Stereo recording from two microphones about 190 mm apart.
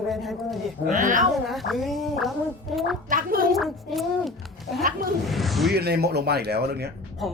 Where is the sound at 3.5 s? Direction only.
Centre (ahead or behind).